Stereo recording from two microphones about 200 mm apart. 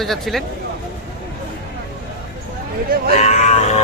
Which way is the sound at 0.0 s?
Centre (ahead or behind).